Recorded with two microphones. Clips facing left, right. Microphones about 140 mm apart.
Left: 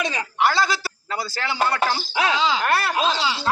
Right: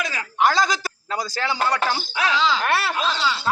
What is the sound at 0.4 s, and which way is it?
Speech, 15° right (ahead or behind).